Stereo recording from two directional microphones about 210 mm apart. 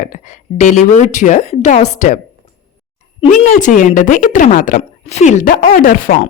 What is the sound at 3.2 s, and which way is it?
Speech, 35° left (ahead or behind).